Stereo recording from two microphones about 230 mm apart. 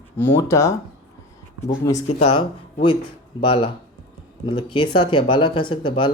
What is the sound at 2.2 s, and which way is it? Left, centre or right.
Speech, left.